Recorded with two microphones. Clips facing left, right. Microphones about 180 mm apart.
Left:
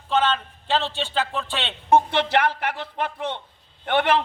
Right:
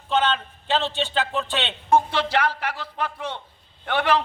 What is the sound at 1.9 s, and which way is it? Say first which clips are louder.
A man's voice: left 2 dB; 20° left (ahead or behind).